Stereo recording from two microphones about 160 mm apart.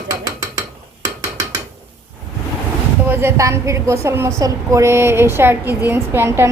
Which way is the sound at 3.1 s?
15° right (ahead or behind).